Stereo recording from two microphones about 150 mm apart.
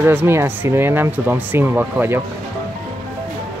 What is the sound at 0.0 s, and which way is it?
Speech, 15° right (ahead or behind).